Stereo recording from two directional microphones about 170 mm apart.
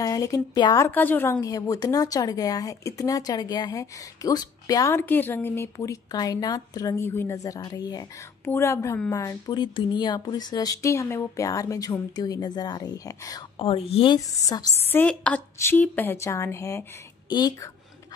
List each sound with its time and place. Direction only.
0.0 s a woman's voice: 20° left (ahead or behind)
13.6 s a woman's voice: 35° left (ahead or behind)
14.9 s a woman's voice: 10° left (ahead or behind); by 17.6 s 25° left (ahead or behind)